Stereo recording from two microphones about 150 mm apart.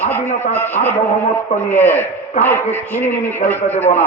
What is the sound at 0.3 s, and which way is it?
Speech, 50° left (ahead or behind).